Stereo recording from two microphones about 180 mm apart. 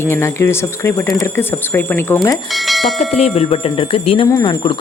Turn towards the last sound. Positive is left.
turn(degrees=25)  # may be behind; listen again after turning